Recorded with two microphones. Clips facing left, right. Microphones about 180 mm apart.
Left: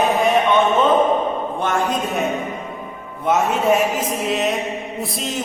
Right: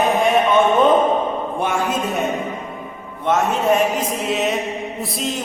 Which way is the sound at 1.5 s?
10° right (ahead or behind).